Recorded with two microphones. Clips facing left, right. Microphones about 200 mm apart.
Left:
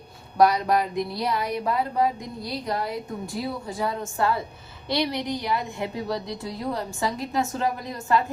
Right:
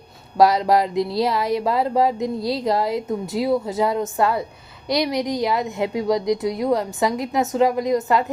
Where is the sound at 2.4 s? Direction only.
90° right.